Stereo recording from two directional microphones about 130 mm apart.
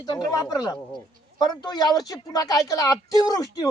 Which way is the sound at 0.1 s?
30° left (ahead or behind).